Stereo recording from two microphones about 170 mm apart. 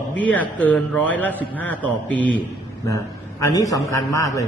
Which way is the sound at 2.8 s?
20° left (ahead or behind).